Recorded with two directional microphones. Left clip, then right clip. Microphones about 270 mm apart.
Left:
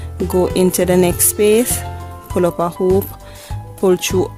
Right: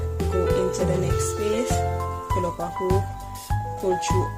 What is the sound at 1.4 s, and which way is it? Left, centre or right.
Speech, left.